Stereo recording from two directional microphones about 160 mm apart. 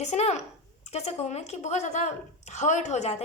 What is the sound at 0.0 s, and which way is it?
A woman's voice, 45° left (ahead or behind).